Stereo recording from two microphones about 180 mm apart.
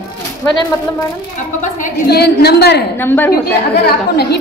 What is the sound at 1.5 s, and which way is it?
Speech, 45° left (ahead or behind).